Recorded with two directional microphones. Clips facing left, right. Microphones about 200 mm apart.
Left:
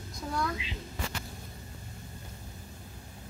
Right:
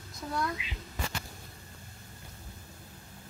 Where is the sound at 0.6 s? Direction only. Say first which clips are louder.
Left 3 dB; 30° left (ahead or behind).